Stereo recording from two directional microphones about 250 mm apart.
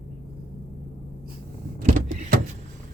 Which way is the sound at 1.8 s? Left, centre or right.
Right.